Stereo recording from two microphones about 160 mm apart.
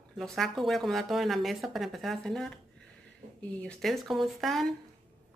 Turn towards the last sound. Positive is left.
turn(degrees=0)  # may be behind; listen again after turning